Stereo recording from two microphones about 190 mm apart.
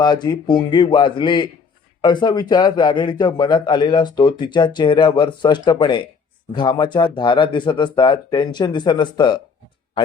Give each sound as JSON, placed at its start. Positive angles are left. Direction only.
{"t": 0.0, "sound": "a man's voice", "side_deg": 20}